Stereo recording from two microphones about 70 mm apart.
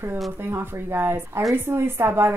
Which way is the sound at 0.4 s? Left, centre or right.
Right.